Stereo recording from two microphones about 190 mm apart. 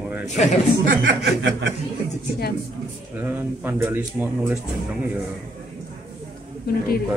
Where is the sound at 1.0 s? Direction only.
75° right (ahead or behind).